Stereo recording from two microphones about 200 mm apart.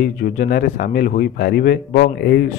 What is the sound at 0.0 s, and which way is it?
Speech, 45° left (ahead or behind).